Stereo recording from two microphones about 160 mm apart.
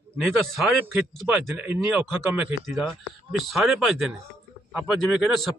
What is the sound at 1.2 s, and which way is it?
Speech, 5° right (ahead or behind).